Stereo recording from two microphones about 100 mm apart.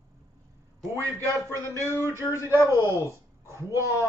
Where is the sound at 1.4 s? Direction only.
25° left (ahead or behind).